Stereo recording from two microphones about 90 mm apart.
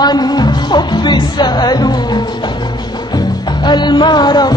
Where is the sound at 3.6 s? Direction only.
55° left (ahead or behind).